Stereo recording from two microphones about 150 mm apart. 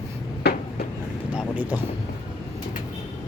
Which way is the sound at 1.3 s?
10° right (ahead or behind).